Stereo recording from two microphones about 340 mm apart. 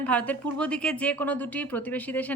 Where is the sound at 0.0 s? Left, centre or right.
Centre.